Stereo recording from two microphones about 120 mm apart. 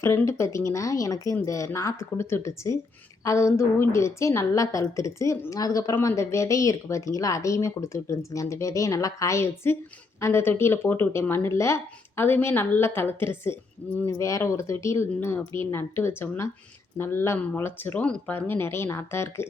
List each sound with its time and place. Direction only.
0.0 s a woman's voice: 20° left (ahead or behind)